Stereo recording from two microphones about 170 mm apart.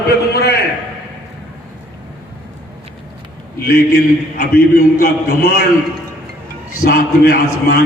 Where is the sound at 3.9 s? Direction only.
65° left (ahead or behind).